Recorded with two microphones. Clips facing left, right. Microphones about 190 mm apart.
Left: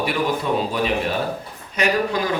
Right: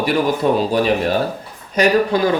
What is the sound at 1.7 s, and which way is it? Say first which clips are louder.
Speech: right 6 dB; 35° right (ahead or behind).